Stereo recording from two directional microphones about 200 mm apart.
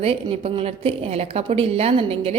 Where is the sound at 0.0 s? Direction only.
30° right (ahead or behind).